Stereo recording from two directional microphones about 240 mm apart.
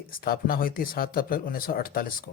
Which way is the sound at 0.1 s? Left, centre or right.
Left.